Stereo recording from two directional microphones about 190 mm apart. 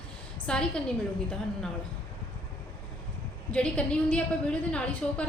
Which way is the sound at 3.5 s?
5° left (ahead or behind).